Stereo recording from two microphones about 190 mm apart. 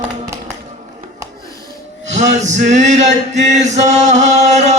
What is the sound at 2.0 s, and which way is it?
Male singing, 40° right (ahead or behind).